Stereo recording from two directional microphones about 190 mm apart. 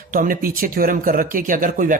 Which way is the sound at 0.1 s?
45° right (ahead or behind).